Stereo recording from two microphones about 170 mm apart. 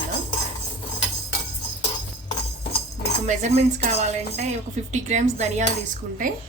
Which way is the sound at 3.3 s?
40° right (ahead or behind).